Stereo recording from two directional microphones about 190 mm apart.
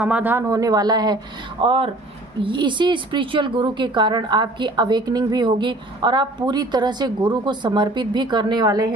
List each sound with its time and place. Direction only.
0.0 s speech: 10° right (ahead or behind)